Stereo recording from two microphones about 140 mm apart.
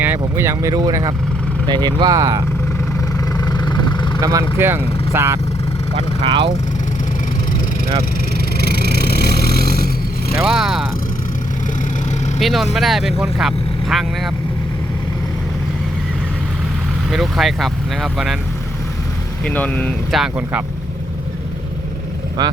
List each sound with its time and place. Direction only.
0.0 s speech: 15° right (ahead or behind)
3.2 s vehicle: 30° left (ahead or behind)
4.2 s speech: 25° right (ahead or behind)
5.9 s speech: 40° right (ahead or behind)
8.5 s vehicle: 90° left
10.3 s vehicle: 5° right (ahead or behind)
12.4 s speech: centre (ahead or behind)
17.1 s speech: centre (ahead or behind)
19.5 s speech: 10° left (ahead or behind)
20.1 s speech: 5° right (ahead or behind)